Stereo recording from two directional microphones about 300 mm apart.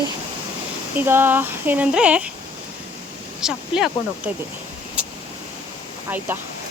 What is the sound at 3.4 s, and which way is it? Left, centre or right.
Speech, centre.